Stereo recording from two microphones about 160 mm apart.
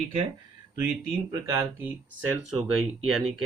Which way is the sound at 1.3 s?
20° right (ahead or behind).